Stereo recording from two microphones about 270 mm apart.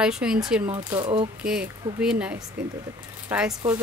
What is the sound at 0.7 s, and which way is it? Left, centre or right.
Speech, centre.